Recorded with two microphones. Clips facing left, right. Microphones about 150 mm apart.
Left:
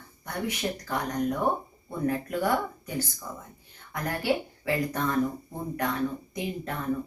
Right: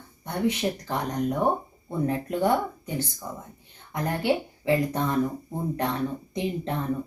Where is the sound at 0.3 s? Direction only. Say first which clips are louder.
Right 5 dB; 25° right (ahead or behind).